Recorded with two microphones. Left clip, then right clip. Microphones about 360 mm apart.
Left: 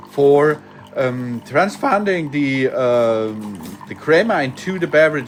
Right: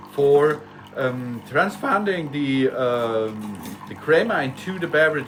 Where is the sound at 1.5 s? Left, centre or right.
Centre.